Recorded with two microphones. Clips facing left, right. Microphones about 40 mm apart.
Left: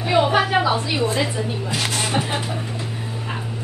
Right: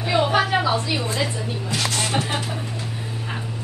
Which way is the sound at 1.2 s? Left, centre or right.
Centre.